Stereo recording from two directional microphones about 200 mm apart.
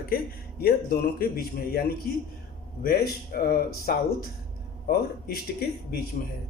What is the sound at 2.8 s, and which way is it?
A man's voice, 50° left (ahead or behind).